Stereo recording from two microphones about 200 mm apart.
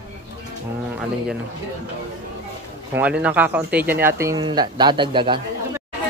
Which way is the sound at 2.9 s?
5° right (ahead or behind).